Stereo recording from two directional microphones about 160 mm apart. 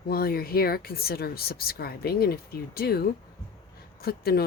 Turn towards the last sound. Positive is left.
turn(degrees=70)  # may be behind; listen again after turning